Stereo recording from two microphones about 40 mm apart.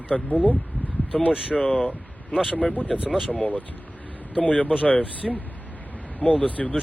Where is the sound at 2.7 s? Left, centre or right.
Left.